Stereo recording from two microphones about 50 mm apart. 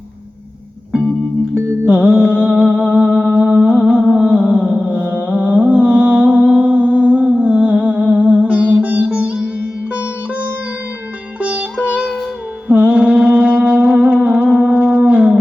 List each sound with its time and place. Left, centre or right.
1.9 s music: right
11.3 s music: right
12.6 s mantra: right
14.0 s humming: right